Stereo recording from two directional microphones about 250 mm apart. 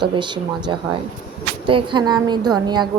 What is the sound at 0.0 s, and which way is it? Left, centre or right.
Speech, centre.